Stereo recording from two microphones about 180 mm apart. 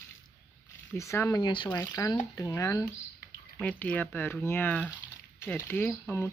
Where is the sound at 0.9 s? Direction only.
15° left (ahead or behind).